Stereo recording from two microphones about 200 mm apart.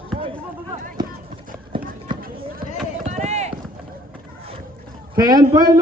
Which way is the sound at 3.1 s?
35° right (ahead or behind).